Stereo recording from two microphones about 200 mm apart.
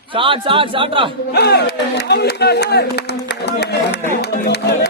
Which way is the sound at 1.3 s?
55° left (ahead or behind).